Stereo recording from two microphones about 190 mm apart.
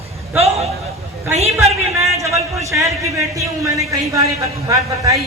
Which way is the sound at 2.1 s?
15° right (ahead or behind).